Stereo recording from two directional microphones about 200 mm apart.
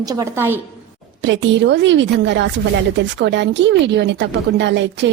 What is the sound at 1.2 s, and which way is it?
A woman's voice, 65° right (ahead or behind).